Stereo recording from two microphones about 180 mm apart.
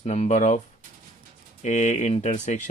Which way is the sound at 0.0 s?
40° left (ahead or behind).